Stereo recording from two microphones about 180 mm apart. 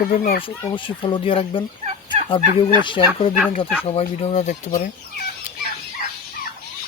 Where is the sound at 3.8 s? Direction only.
35° left (ahead or behind).